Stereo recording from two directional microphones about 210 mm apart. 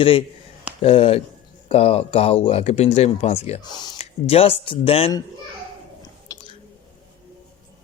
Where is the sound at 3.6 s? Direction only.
20° left (ahead or behind).